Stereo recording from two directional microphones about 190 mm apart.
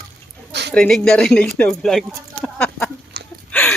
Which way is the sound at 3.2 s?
60° right (ahead or behind).